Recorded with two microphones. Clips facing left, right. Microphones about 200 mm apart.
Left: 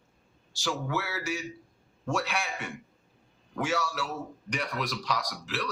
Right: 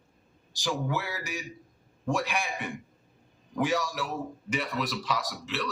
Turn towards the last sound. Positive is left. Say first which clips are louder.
# right 1 dB
turn(degrees=0)  # may be behind; listen again after turning